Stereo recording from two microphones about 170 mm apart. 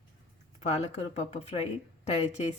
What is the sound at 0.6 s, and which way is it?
Speech, 40° left (ahead or behind).